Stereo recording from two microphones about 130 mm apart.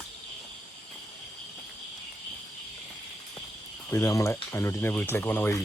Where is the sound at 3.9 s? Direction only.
25° left (ahead or behind).